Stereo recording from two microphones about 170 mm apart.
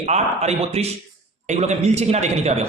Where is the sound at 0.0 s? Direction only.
40° right (ahead or behind).